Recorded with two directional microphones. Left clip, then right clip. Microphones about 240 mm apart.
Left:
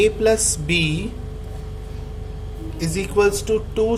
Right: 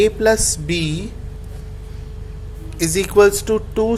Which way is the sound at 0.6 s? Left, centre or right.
Right.